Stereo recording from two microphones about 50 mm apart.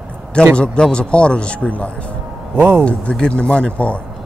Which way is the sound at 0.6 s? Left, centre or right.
Centre.